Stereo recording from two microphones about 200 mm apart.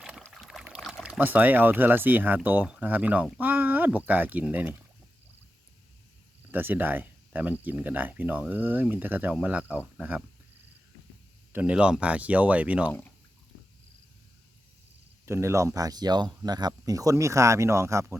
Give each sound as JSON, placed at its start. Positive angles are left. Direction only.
{"t": 0.2, "sound": "speech", "side_deg": 0}
{"t": 6.5, "sound": "speech", "side_deg": -10}
{"t": 11.5, "sound": "speech", "side_deg": -5}
{"t": 12.9, "sound": "speech", "side_deg": 10}
{"t": 15.3, "sound": "speech", "side_deg": -15}